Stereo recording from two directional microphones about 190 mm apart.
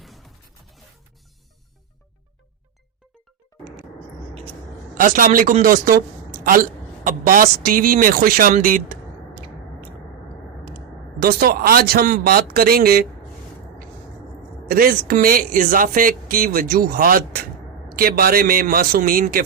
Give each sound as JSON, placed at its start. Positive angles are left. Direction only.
{"t": 0.0, "sound": "music", "side_deg": 0}
{"t": 4.9, "sound": "speech", "side_deg": -45}
{"t": 11.2, "sound": "speech", "side_deg": -55}
{"t": 14.7, "sound": "speech", "side_deg": -50}